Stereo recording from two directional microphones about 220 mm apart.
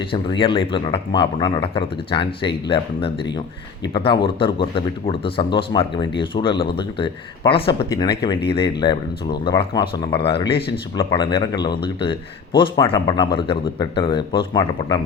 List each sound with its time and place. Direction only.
0.1 s speech: 25° left (ahead or behind)